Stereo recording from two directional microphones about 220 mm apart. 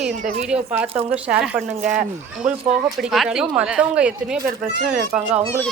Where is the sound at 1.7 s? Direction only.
35° right (ahead or behind).